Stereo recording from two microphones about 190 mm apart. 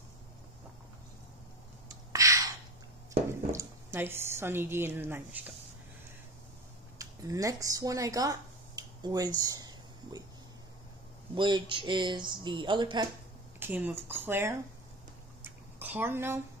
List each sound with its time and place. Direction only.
1.9 s a sound: 15° right (ahead or behind)
3.3 s speech: 15° right (ahead or behind)
7.0 s speech: 15° right (ahead or behind)
11.3 s speech: 25° right (ahead or behind)
13.6 s speech: 10° right (ahead or behind)
15.4 s a sound: 10° right (ahead or behind)